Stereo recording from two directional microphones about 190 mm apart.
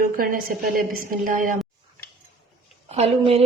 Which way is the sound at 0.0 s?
50° right (ahead or behind).